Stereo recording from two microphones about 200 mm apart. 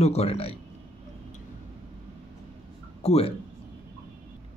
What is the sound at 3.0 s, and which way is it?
Speech, 30° left (ahead or behind).